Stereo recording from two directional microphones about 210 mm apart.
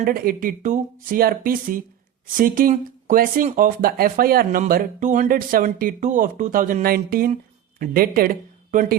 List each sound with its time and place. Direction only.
0.0 s speech: 45° right (ahead or behind)